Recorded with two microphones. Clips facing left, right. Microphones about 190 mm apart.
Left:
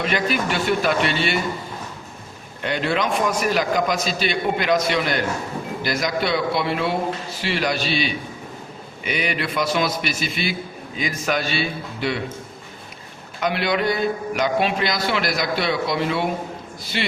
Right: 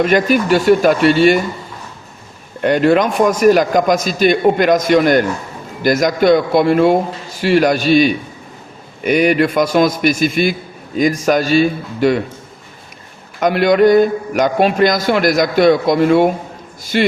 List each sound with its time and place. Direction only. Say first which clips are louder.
0.0 s a man's voice: right 9 dB; 45° right (ahead or behind)
2.6 s a man's voice: right 11 dB; 50° right (ahead or behind)
13.4 s a man's voice: right 11 dB; 45° right (ahead or behind)